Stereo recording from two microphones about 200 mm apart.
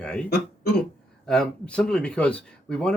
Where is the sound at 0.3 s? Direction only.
50° left (ahead or behind).